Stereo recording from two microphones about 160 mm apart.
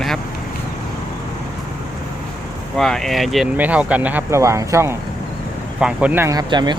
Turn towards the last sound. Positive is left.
turn(degrees=-30)  # may be behind; listen again after turning